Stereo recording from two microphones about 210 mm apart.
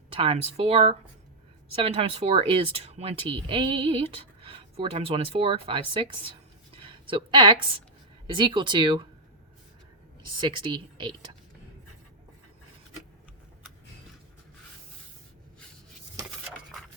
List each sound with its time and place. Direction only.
0.1 s a woman's voice: 25° right (ahead or behind)
10.6 s speech: 20° right (ahead or behind)